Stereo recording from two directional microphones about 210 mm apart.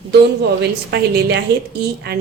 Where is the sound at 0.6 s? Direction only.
50° right (ahead or behind).